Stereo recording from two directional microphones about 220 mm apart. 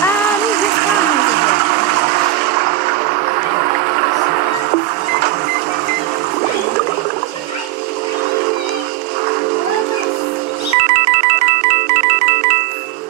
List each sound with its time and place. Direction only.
2.5 s a sound: 40° right (ahead or behind)
4.0 s music: 40° right (ahead or behind)
10.8 s music: 40° right (ahead or behind)